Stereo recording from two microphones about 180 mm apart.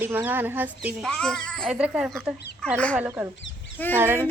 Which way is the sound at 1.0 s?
5° left (ahead or behind).